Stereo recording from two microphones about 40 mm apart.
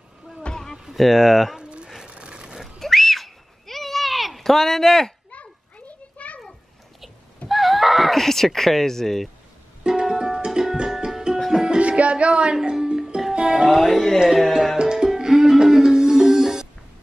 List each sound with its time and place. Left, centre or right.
0.5 s music: left
0.9 s speech: centre
1.6 s a sound: right
2.8 s a sound: centre
5.3 s children playing: left
7.4 s speech: centre
10.0 s music: centre
11.1 s music: centre
11.8 s music: right
12.5 s music: centre
13.7 s music: centre
14.3 s tabla: centre
14.8 s music: centre